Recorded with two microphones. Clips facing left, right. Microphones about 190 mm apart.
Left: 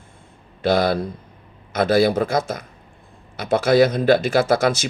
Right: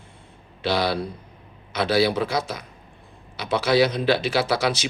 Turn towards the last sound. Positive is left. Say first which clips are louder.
# left 5 dB
turn(degrees=50)  # may be behind; listen again after turning